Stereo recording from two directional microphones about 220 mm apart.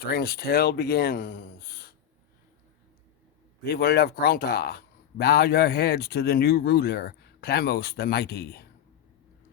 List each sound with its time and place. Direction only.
0.0 s speech: 45° left (ahead or behind)
3.6 s speech: 45° left (ahead or behind)